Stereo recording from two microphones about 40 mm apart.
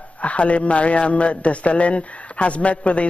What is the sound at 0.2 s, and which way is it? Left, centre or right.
A man's voice, left.